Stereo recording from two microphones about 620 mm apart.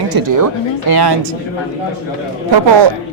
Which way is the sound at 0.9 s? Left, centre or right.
Right.